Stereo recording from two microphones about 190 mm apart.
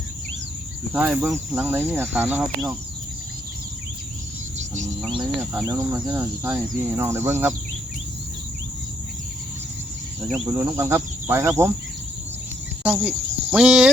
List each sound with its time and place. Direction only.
0.9 s speech: 5° right (ahead or behind)
5.4 s speech: 15° right (ahead or behind)
10.3 s speech: 10° right (ahead or behind)
12.8 s speech: 10° right (ahead or behind)